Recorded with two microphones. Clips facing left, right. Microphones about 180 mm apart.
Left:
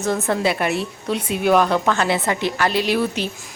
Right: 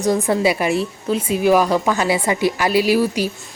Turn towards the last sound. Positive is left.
turn(degrees=-5)  # may be behind; listen again after turning